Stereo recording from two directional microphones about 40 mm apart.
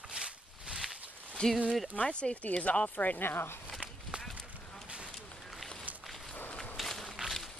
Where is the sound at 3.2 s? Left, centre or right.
Left.